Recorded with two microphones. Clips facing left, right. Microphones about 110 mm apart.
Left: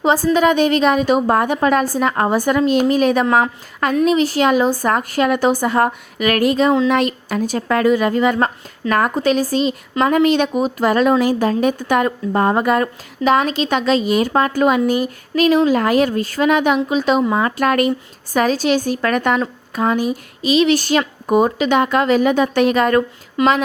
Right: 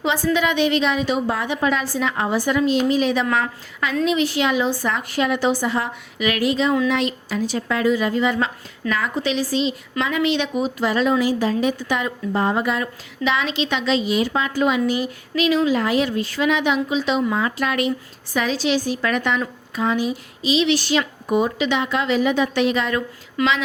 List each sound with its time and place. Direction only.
0.0 s a woman's voice: 40° left (ahead or behind)
4.0 s a woman's voice: 40° left (ahead or behind)
23.4 s a woman's voice: 20° left (ahead or behind)